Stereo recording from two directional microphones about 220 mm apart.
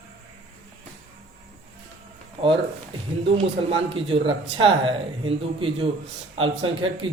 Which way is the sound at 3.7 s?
25° right (ahead or behind).